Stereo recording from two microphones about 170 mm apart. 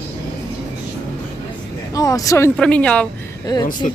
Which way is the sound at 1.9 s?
20° left (ahead or behind).